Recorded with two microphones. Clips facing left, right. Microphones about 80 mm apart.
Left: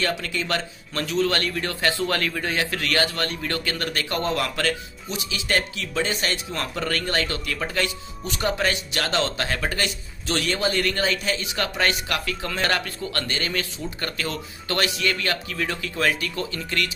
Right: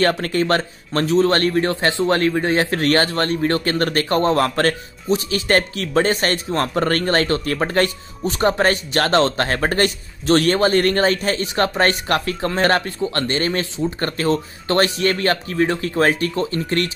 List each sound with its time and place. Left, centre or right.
0.0 s speech: right